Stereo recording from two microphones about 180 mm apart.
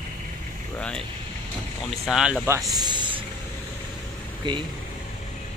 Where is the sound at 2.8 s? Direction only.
25° right (ahead or behind).